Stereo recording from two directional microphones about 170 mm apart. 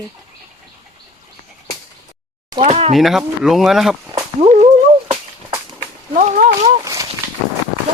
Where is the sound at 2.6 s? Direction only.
35° right (ahead or behind).